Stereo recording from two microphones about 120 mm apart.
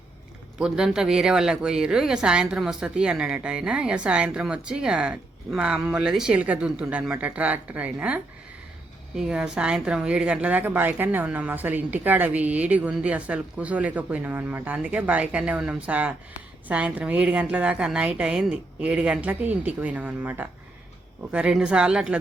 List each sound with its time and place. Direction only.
0.6 s speech: 5° right (ahead or behind)